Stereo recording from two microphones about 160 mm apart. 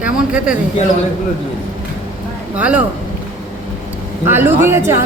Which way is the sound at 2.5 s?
10° right (ahead or behind).